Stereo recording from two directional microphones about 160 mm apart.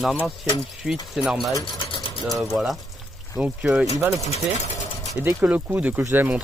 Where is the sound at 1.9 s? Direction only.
35° left (ahead or behind).